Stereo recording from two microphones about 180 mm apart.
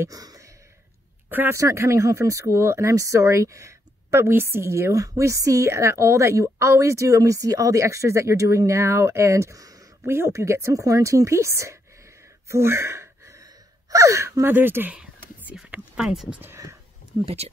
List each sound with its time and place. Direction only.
0.0 s a sound: 20° right (ahead or behind)
1.3 s speech: 10° right (ahead or behind)
12.4 s gasp: 15° right (ahead or behind)
13.8 s speech: 15° right (ahead or behind)